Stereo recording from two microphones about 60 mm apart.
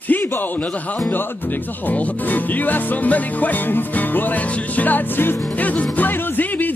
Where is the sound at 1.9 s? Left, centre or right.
Left.